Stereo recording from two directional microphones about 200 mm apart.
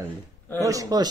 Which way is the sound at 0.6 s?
15° right (ahead or behind).